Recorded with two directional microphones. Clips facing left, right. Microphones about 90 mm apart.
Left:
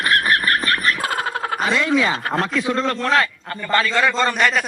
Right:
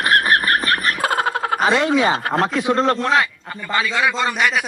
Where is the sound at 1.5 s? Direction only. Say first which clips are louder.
Right 2 dB; 45° right (ahead or behind).